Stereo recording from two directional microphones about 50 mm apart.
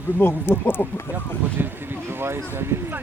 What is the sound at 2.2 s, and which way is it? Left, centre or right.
Speech, right.